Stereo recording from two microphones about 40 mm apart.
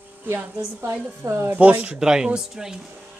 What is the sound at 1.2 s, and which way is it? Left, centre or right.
Speech, right.